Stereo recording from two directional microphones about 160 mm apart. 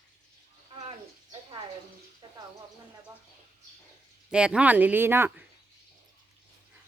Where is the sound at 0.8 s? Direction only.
35° right (ahead or behind).